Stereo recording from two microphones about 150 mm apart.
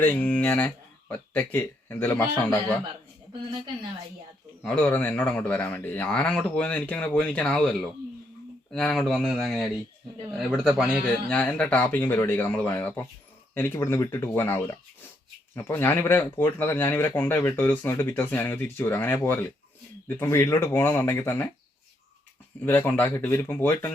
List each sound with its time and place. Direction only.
0.0 s speech: 10° left (ahead or behind)
4.6 s speech: 10° left (ahead or behind)
22.6 s speech: 15° left (ahead or behind)